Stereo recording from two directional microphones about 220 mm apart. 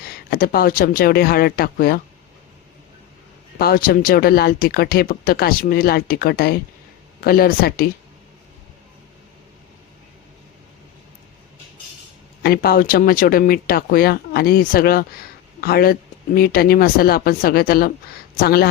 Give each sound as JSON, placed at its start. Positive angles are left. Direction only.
{"t": 0.0, "sound": "speech", "side_deg": 45}
{"t": 3.6, "sound": "speech", "side_deg": 40}
{"t": 12.4, "sound": "speech", "side_deg": 45}